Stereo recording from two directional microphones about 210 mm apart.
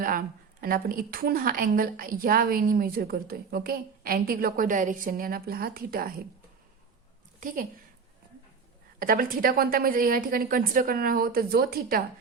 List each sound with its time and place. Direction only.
0.0 s a woman's voice: 40° right (ahead or behind)
7.3 s a woman's voice: 40° right (ahead or behind)
9.0 s a woman's voice: 40° right (ahead or behind)